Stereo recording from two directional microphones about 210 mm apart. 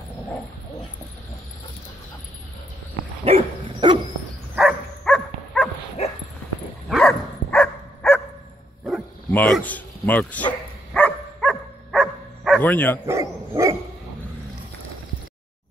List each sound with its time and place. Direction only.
3.3 s dog: 25° right (ahead or behind)
4.6 s dog: centre (ahead or behind)
6.0 s dog: 30° left (ahead or behind)
6.9 s dog: 5° left (ahead or behind)
13.0 s dog: 15° right (ahead or behind)